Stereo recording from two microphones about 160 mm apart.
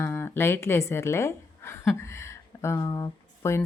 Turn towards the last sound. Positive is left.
turn(degrees=20)  # may be behind; listen again after turning